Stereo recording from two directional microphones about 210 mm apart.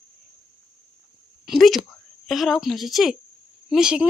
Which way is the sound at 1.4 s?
Centre (ahead or behind).